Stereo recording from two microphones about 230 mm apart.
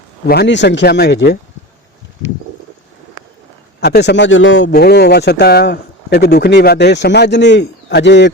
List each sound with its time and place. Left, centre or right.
0.3 s speech: left
3.8 s speech: left
4.7 s speech: left